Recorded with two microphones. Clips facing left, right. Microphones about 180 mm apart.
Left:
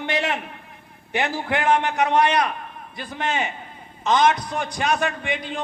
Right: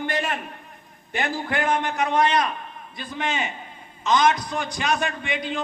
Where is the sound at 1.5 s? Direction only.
65° left (ahead or behind).